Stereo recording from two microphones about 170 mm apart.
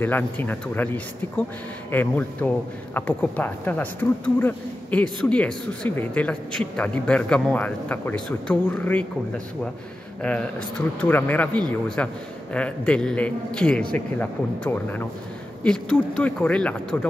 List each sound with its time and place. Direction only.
0.0 s a man's voice: 10° left (ahead or behind)
11.0 s a man's voice: 10° left (ahead or behind)